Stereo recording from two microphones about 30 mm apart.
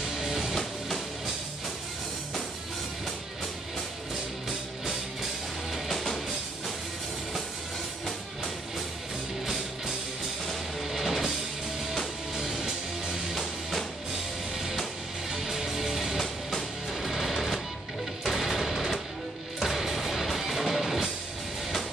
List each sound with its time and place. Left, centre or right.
0.2 s music: centre
0.6 s music: centre
5.7 s music: centre
10.4 s music: centre
13.1 s music: centre
14.5 s music: centre